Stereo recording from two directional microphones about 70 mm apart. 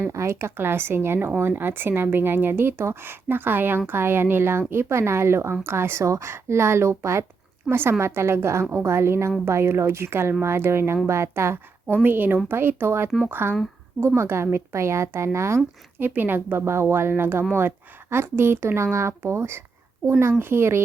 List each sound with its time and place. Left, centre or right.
0.0 s a woman's voice: right
16.0 s a woman's voice: right